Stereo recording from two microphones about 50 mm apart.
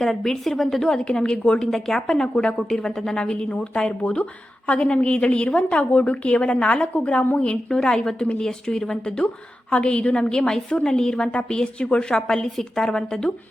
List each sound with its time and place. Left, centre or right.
0.0 s a woman's voice: centre